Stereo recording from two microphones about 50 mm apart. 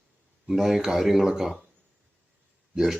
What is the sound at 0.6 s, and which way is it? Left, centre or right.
Speech, centre.